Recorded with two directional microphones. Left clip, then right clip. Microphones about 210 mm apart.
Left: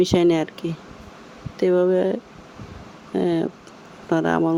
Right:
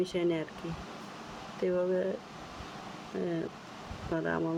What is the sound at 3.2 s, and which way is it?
Speech, 40° left (ahead or behind).